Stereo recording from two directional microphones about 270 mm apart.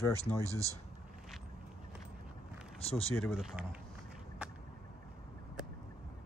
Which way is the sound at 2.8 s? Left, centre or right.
Left.